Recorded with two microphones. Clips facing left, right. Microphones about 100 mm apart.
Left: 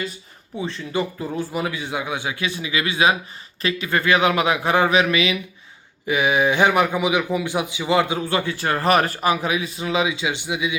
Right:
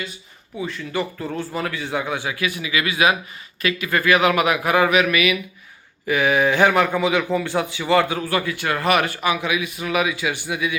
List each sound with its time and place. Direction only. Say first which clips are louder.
0.5 s a man's voice: left 1 dB; 25° left (ahead or behind)